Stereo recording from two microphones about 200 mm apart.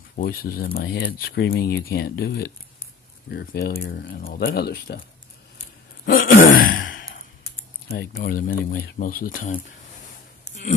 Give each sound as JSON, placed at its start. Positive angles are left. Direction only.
{"t": 0.1, "sound": "speech", "side_deg": 50}
{"t": 6.0, "sound": "groan", "side_deg": 45}
{"t": 6.5, "sound": "sigh", "side_deg": 45}
{"t": 7.9, "sound": "speech", "side_deg": 50}